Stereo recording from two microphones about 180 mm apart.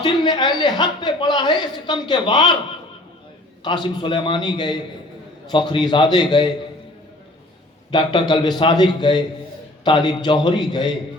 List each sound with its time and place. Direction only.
0.0 s a man's voice: 25° left (ahead or behind)
3.6 s a man's voice: 25° left (ahead or behind)
7.9 s a man's voice: 25° left (ahead or behind)